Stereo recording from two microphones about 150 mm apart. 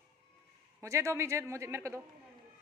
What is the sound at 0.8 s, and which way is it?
A man's voice, 20° right (ahead or behind).